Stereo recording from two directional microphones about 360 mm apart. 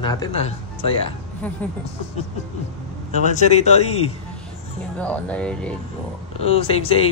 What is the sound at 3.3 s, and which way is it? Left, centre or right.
Speech, centre.